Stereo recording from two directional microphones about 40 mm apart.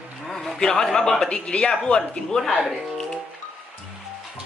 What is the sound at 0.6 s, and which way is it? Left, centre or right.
Speech, centre.